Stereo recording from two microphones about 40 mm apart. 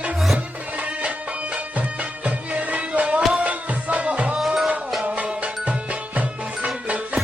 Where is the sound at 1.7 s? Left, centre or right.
Right.